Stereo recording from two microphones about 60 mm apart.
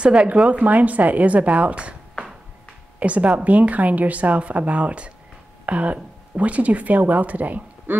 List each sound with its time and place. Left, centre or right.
0.0 s a woman's voice: centre
3.0 s a woman's voice: right